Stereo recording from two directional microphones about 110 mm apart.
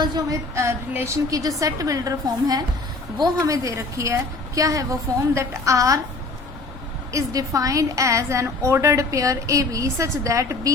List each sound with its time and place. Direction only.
0.0 s a woman's voice: 30° right (ahead or behind)
7.1 s a woman's voice: 30° right (ahead or behind)